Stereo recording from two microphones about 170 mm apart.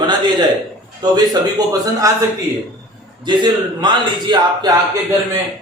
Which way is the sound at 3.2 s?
25° right (ahead or behind).